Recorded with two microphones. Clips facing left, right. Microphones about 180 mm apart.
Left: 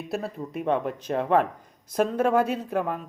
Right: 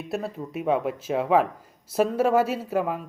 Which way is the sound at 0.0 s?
Centre (ahead or behind).